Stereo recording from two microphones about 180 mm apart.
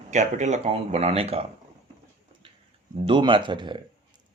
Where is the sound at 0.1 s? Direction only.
40° right (ahead or behind).